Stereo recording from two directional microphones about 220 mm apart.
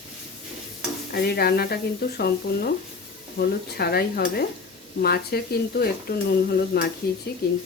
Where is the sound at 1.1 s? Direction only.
45° left (ahead or behind).